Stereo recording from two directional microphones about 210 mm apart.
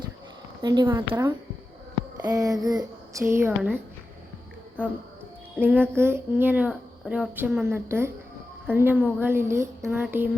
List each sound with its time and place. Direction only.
0.6 s a woman's voice: 20° right (ahead or behind)
5.5 s a child's voice: 10° right (ahead or behind)